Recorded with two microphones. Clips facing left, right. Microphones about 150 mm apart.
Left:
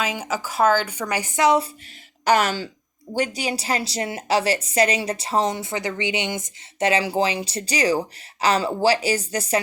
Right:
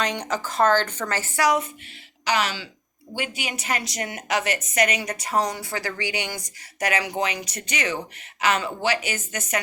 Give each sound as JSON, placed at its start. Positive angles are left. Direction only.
{"t": 0.0, "sound": "speech", "side_deg": 5}
{"t": 2.2, "sound": "speech", "side_deg": 50}
{"t": 3.2, "sound": "a woman's voice", "side_deg": 35}